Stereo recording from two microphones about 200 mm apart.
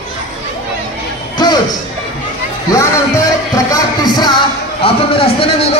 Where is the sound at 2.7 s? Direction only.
15° left (ahead or behind).